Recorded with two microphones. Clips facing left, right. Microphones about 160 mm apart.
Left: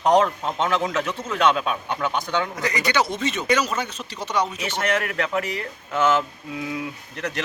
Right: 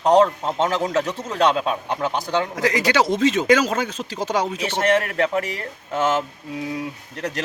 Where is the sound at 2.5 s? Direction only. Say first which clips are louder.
Right 6 dB; 90° right.